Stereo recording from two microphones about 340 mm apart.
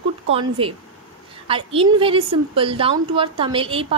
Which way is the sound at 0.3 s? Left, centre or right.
Centre.